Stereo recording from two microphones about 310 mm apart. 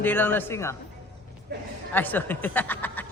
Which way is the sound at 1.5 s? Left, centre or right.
Right.